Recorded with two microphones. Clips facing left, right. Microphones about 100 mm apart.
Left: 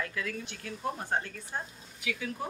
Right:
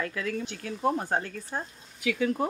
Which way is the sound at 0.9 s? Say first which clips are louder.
Right 4 dB; 60° right (ahead or behind).